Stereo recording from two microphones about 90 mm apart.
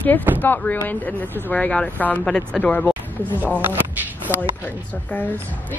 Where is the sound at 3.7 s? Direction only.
25° right (ahead or behind).